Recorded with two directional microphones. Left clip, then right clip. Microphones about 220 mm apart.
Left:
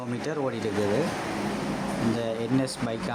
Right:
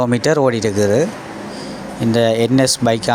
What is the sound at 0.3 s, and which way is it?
Speech, 35° right (ahead or behind).